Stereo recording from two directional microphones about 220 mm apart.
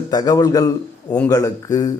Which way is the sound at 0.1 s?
15° left (ahead or behind).